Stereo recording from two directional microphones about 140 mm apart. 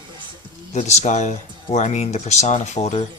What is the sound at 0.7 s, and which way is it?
Speech, 55° left (ahead or behind).